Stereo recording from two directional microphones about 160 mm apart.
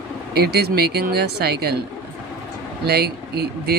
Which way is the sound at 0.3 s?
85° right.